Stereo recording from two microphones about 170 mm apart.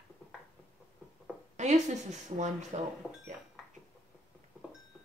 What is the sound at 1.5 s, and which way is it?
Speech, 45° right (ahead or behind).